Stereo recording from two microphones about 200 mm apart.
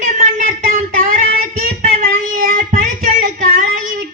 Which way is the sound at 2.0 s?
50° right (ahead or behind).